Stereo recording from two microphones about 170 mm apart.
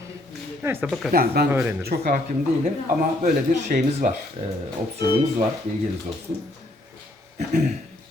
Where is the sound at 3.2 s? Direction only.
50° right (ahead or behind).